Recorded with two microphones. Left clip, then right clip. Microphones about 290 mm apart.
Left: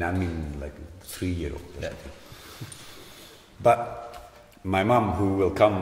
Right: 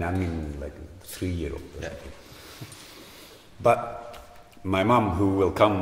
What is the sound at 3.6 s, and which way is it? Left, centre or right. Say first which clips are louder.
A man's voice: left 1 dB; centre.